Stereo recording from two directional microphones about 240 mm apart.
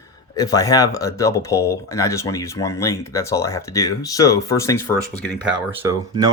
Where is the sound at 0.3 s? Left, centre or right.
Centre.